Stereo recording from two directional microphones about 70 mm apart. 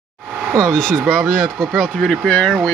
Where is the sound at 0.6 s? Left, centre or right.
Centre.